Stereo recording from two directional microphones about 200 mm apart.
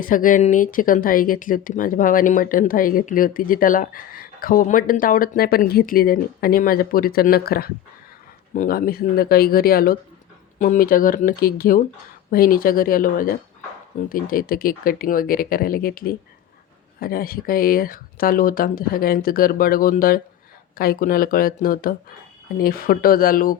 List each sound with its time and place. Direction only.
0.0 s speech: 40° left (ahead or behind)